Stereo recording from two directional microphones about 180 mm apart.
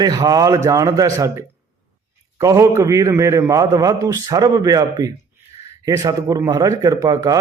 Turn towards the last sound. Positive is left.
turn(degrees=-20)  # may be behind; listen again after turning